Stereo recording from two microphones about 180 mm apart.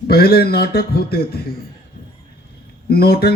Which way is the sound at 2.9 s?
60° left (ahead or behind).